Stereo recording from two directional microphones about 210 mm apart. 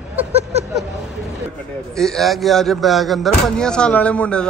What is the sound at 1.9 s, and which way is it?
Speech, centre (ahead or behind).